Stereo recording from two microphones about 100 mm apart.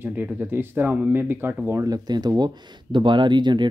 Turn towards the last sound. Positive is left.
turn(degrees=-50)  # may be behind; listen again after turning